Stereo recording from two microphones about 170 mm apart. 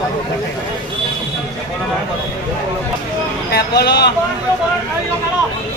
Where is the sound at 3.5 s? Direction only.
75° left (ahead or behind).